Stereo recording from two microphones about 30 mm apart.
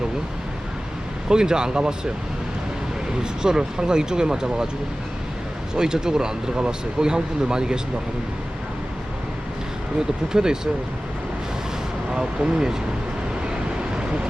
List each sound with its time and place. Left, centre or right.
1.3 s speech: right
3.4 s speech: right
5.7 s speech: right
10.3 s speech: right
12.1 s speech: right